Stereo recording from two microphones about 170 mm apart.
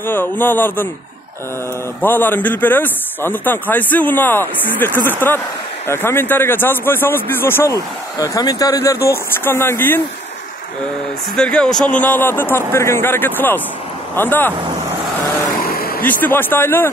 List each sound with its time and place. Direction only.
0.0 s speech: 10° left (ahead or behind)
2.0 s speech: 10° left (ahead or behind)
11.3 s speech: 5° left (ahead or behind)
15.6 s vehicle: 65° left (ahead or behind)
16.1 s speech: 10° left (ahead or behind)